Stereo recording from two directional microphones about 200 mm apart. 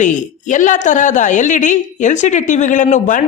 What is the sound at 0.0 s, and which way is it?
A woman's voice, 40° left (ahead or behind).